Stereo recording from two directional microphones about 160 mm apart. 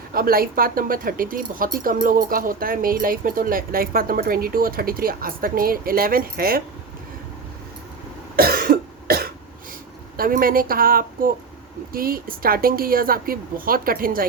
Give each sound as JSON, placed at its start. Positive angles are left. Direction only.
{"t": 0.1, "sound": "speech", "side_deg": -65}
{"t": 8.4, "sound": "cough", "side_deg": -70}
{"t": 10.2, "sound": "speech", "side_deg": -65}